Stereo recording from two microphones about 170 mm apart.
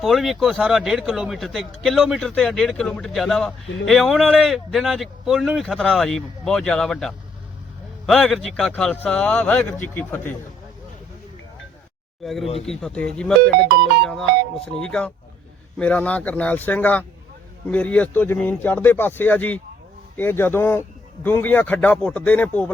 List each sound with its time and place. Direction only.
0.0 s a man's voice: centre (ahead or behind)
12.2 s a man's voice: centre (ahead or behind)
13.7 s music: 75° right (ahead or behind)
14.0 s a man's voice: centre (ahead or behind)